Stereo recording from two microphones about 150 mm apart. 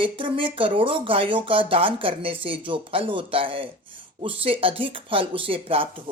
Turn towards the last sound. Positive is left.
turn(degrees=-35)  # may be behind; listen again after turning